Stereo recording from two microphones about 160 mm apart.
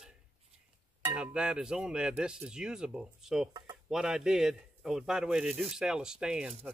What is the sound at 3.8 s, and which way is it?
Speech, 5° right (ahead or behind).